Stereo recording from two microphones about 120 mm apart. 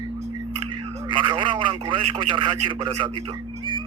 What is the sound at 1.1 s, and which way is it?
A man's voice, 40° right (ahead or behind).